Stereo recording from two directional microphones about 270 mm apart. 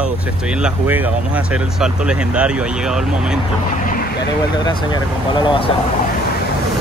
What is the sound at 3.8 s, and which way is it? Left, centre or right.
Vehicle, left.